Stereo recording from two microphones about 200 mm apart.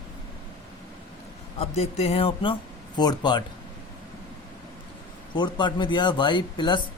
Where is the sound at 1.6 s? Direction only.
30° left (ahead or behind).